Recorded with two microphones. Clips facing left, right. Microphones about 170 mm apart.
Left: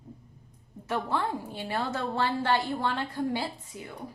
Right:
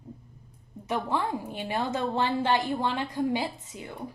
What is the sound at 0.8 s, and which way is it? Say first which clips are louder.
A woman's voice: right 1 dB; 15° right (ahead or behind).